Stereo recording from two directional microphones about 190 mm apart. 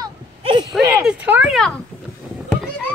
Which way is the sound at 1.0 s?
5° right (ahead or behind).